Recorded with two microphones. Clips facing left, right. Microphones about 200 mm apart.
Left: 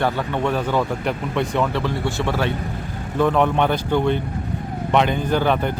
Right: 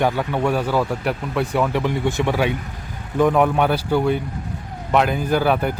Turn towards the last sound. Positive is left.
turn(degrees=-5)  # may be behind; listen again after turning